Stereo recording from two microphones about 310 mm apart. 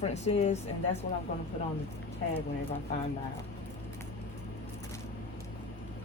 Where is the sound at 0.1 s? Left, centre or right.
Left.